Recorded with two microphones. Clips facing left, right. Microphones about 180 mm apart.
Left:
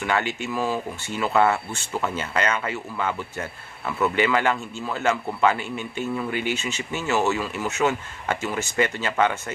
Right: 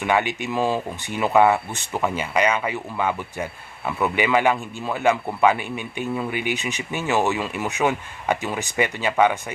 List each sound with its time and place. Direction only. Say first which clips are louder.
0.0 s speech: right 3 dB; 15° right (ahead or behind)